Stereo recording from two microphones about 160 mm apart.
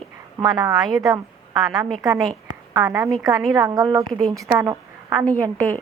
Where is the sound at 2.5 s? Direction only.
25° right (ahead or behind).